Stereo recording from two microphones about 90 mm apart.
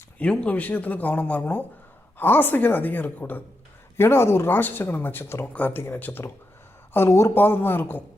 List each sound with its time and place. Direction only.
0.2 s speech: 15° left (ahead or behind)